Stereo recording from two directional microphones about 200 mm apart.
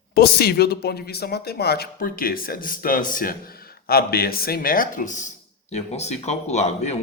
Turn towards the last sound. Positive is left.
turn(degrees=35)  # may be behind; listen again after turning